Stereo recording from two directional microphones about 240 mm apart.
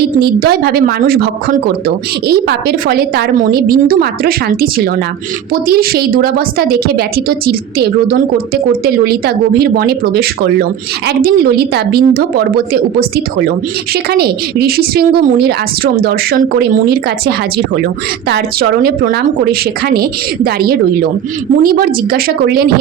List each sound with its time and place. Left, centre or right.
0.2 s a woman's voice: right